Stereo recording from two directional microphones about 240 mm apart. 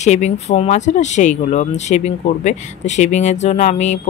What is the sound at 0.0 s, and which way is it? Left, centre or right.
Speech, left.